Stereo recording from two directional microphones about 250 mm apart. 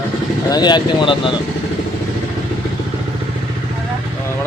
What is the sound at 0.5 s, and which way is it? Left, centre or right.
Speech, centre.